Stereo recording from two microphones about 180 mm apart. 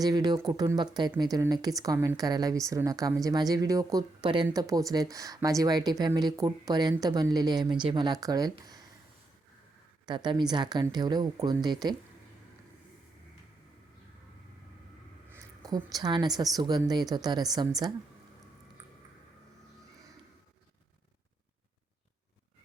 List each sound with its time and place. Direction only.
0.0 s a woman's voice: 20° right (ahead or behind)
10.1 s a woman's voice: 25° right (ahead or behind)
15.6 s a woman's voice: 20° right (ahead or behind)